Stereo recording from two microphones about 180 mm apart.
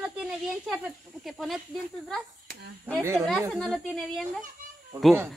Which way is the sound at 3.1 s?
Centre (ahead or behind).